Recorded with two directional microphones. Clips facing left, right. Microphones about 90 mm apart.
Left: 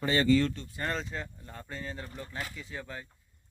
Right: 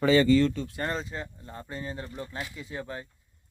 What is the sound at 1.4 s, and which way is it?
Speech, 15° right (ahead or behind).